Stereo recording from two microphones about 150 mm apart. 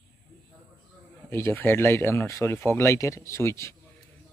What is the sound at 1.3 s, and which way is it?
Speech, 15° left (ahead or behind).